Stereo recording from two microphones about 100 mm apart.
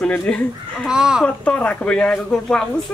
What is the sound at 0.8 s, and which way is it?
Speech, 5° right (ahead or behind).